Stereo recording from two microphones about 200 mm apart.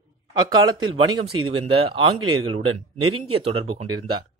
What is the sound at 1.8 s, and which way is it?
Speech, 25° right (ahead or behind).